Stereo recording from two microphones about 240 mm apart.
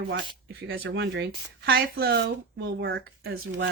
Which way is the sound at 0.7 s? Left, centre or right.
Right.